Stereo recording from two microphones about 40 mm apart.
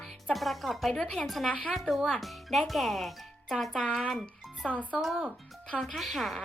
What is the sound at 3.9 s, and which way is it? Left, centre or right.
Speech, centre.